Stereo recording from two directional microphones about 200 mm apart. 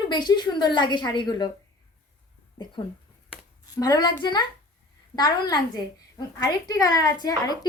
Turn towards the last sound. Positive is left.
turn(degrees=20)  # may be behind; listen again after turning